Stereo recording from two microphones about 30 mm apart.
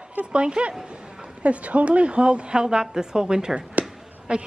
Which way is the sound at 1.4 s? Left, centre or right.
Right.